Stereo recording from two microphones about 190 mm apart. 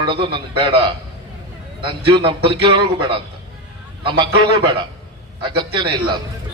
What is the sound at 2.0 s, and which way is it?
A man's voice, 25° right (ahead or behind).